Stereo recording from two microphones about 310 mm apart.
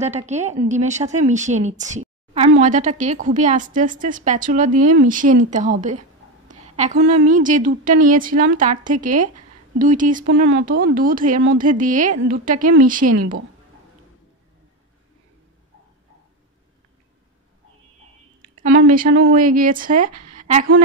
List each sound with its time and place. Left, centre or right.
0.0 s a woman's voice: right
18.7 s a woman's voice: right